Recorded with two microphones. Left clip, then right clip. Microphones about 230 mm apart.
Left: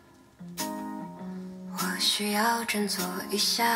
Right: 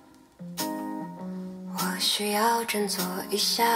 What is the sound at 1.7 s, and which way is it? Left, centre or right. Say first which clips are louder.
Music: even; left.